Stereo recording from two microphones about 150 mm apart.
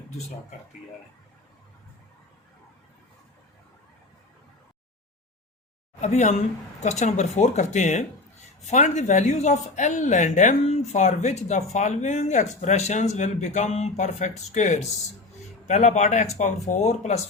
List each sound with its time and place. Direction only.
6.0 s speech: 50° left (ahead or behind)